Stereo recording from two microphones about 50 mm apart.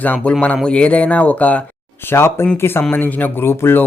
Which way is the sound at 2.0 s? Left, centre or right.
Left.